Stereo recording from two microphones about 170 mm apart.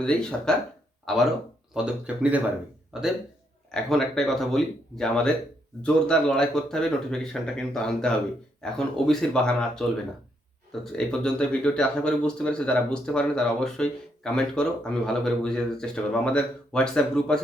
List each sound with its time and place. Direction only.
0.0 s speech: 5° left (ahead or behind)